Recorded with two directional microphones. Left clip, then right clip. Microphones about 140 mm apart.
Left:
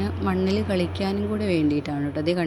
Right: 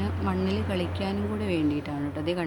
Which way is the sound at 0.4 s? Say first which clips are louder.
Left 5 dB; 30° left (ahead or behind).